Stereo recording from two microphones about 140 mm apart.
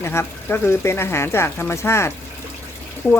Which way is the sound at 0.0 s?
20° left (ahead or behind).